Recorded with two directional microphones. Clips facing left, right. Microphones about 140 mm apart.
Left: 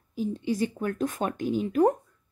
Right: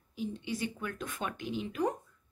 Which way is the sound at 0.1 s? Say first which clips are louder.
Left 8 dB; 40° left (ahead or behind).